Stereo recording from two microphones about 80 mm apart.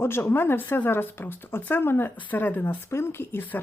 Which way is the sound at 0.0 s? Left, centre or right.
Left.